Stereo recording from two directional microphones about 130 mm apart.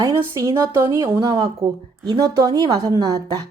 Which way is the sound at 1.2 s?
30° right (ahead or behind).